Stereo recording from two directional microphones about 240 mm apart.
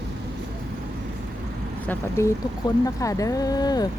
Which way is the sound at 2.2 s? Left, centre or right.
Centre.